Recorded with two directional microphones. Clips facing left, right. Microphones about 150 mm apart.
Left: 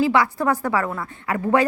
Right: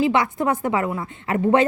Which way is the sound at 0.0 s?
20° right (ahead or behind).